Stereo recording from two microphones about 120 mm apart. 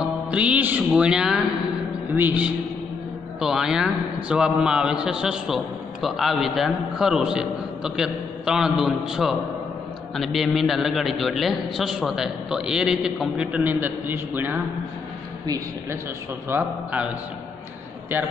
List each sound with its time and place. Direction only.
0.0 s music: 10° right (ahead or behind)
2.1 s a man's voice: 15° right (ahead or behind)
3.3 s a man's voice: 5° right (ahead or behind)
15.4 s a man's voice: 30° right (ahead or behind)
16.4 s a man's voice: 15° right (ahead or behind)